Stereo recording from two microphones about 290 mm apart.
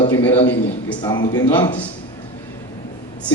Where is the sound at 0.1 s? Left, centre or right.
Centre.